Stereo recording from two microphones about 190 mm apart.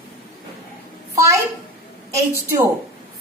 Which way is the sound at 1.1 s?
15° right (ahead or behind).